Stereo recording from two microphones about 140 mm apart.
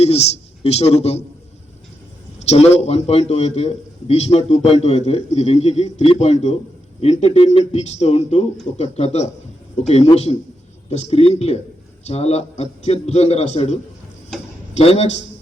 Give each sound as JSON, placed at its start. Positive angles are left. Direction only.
{"t": 0.0, "sound": "a man's voice", "side_deg": 45}
{"t": 2.4, "sound": "a man's voice", "side_deg": 50}